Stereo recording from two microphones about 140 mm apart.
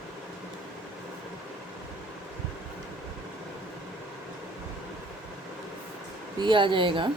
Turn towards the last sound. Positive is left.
turn(degrees=-35)  # may be behind; listen again after turning